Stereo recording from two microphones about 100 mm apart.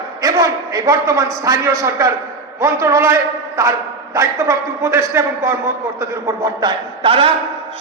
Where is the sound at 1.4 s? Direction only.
30° right (ahead or behind).